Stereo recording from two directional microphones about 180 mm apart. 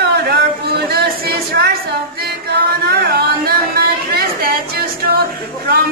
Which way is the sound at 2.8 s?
60° right (ahead or behind).